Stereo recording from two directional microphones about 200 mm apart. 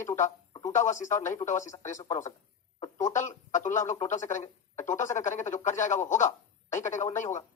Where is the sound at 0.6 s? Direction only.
35° left (ahead or behind).